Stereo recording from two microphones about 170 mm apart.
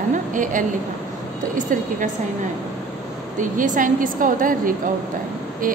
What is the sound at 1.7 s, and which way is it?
Speech, 50° right (ahead or behind).